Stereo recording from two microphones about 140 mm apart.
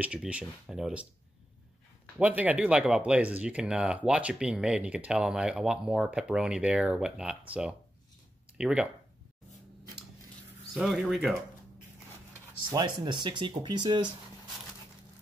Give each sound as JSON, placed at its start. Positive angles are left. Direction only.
{"t": 0.0, "sound": "speech", "side_deg": -10}
{"t": 2.1, "sound": "speech", "side_deg": -10}
{"t": 10.7, "sound": "speech", "side_deg": 0}
{"t": 12.6, "sound": "speech", "side_deg": -30}